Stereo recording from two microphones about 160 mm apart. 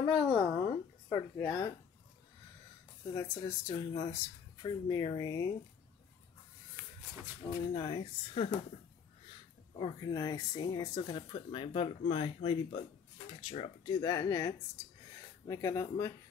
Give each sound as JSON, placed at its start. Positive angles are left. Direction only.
{"t": 0.0, "sound": "speech", "side_deg": 30}
{"t": 1.1, "sound": "speech", "side_deg": 20}
{"t": 3.2, "sound": "speech", "side_deg": 20}
{"t": 7.4, "sound": "speech", "side_deg": 30}
{"t": 9.8, "sound": "speech", "side_deg": 25}
{"t": 14.0, "sound": "speech", "side_deg": 20}